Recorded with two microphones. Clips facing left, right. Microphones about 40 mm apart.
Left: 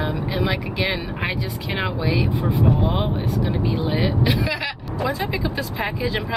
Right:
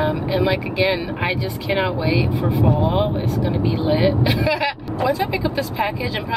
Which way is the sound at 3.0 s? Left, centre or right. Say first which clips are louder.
Right 3 dB; centre.